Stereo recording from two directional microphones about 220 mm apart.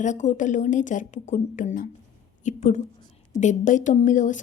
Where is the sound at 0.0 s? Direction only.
35° left (ahead or behind).